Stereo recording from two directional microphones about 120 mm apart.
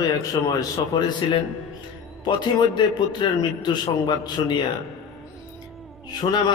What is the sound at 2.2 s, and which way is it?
A man's voice, 40° left (ahead or behind).